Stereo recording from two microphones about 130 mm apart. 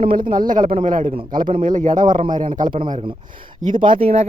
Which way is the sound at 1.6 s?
80° right.